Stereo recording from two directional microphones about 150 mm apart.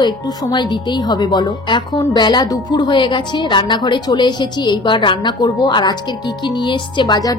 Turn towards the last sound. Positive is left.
turn(degrees=30)  # may be behind; listen again after turning